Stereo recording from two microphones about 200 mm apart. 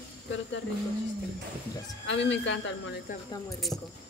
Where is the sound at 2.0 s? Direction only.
65° left (ahead or behind).